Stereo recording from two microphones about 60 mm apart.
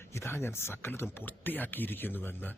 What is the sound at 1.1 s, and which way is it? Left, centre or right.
Speech, left.